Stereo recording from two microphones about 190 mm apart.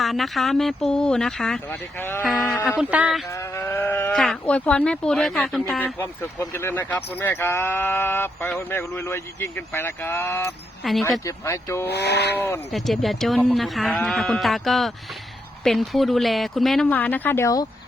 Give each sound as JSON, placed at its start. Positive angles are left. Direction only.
{"t": 0.0, "sound": "speech", "side_deg": 0}
{"t": 2.6, "sound": "speech", "side_deg": -5}
{"t": 3.2, "sound": "speech", "side_deg": 15}
{"t": 10.8, "sound": "speech", "side_deg": 0}
{"t": 11.3, "sound": "speech", "side_deg": 15}
{"t": 11.9, "sound": "speech", "side_deg": 60}
{"t": 12.7, "sound": "speech", "side_deg": 0}